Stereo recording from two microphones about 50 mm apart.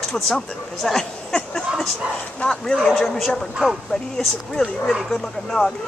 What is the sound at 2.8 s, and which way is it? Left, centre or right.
A man's voice, centre.